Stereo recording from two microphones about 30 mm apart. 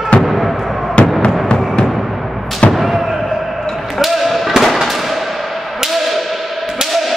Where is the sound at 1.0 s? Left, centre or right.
Left.